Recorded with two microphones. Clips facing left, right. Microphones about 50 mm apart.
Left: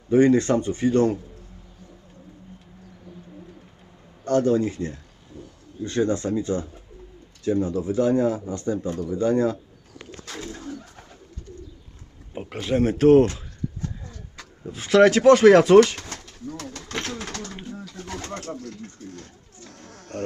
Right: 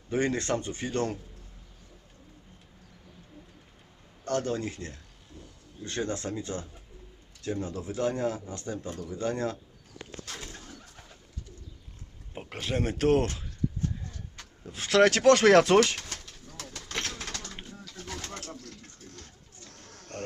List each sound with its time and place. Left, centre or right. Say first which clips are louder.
0.1 s speech: left 11 dB; left
4.2 s speech: left 10 dB; left
7.6 s speech: left 7 dB; left
10.5 s pigeon: left 11 dB; left
12.3 s speech: left 8 dB; centre
14.6 s speech: left 6 dB; centre
16.1 s pigeon: left 9 dB; left
16.8 s pigeon: left 4 dB; centre
17.9 s bird: left 4 dB; left
18.5 s a sound: left 10 dB; centre